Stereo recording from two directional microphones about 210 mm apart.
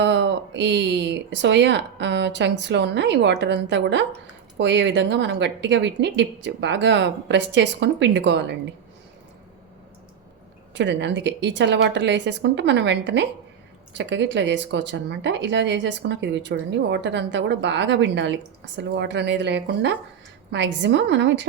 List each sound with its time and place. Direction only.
0.0 s speech: 55° right (ahead or behind)
10.8 s speech: 55° right (ahead or behind)